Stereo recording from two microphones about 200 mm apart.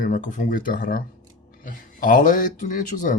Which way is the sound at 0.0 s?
40° left (ahead or behind).